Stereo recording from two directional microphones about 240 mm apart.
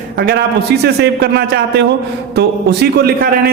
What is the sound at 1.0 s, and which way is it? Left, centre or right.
A man's voice, right.